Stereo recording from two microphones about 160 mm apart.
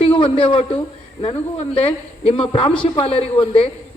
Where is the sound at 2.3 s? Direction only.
30° left (ahead or behind).